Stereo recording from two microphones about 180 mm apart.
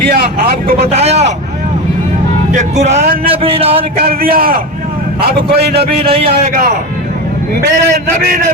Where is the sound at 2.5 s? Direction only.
40° right (ahead or behind).